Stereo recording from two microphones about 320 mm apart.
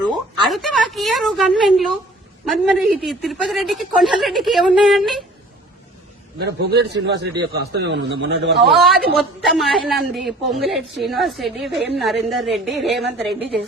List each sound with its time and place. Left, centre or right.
0.4 s a woman's voice: centre
6.4 s a man's voice: right
8.6 s a woman's voice: centre